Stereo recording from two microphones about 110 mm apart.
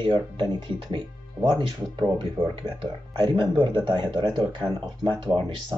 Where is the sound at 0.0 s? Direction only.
45° right (ahead or behind).